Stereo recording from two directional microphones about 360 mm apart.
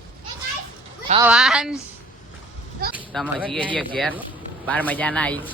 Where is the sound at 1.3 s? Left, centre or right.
Centre.